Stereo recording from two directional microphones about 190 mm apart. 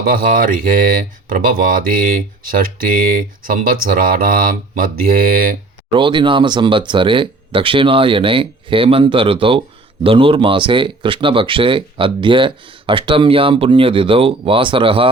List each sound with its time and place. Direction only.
0.0 s speech: 45° right (ahead or behind)
5.9 s speech: 25° right (ahead or behind)